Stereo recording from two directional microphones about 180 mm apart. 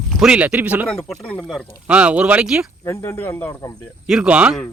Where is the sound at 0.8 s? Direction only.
5° left (ahead or behind).